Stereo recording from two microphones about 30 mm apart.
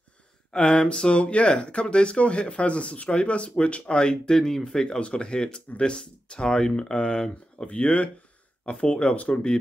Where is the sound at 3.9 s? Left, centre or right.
Left.